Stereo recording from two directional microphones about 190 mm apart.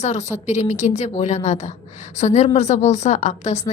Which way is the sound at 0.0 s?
35° left (ahead or behind).